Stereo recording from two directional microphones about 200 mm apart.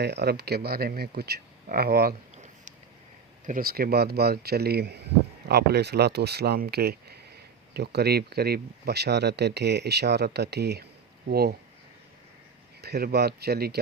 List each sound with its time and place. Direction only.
0.0 s speech: 55° right (ahead or behind)
2.3 s a sound: 35° right (ahead or behind)
3.4 s speech: 45° right (ahead or behind)
12.8 s speech: 50° right (ahead or behind)